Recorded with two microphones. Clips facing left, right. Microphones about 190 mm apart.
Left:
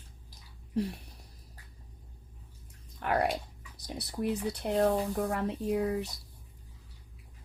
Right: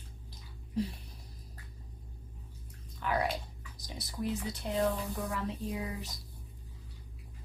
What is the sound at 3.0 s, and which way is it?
Speech, 65° left (ahead or behind).